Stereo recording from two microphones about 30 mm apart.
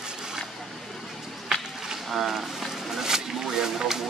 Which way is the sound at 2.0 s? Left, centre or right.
Centre.